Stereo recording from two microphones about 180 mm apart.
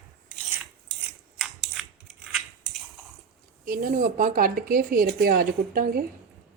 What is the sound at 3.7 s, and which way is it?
Speech, 50° right (ahead or behind).